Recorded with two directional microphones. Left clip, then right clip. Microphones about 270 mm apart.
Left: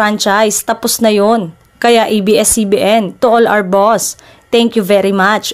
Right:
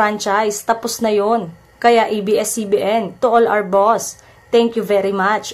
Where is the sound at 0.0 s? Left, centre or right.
Left.